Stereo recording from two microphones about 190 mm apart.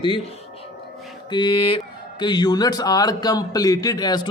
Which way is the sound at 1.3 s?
25° left (ahead or behind).